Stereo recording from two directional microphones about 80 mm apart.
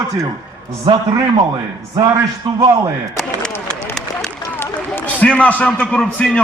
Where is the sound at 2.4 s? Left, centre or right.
Right.